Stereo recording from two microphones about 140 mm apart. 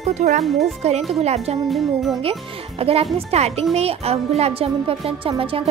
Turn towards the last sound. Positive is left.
turn(degrees=-40)  # may be behind; listen again after turning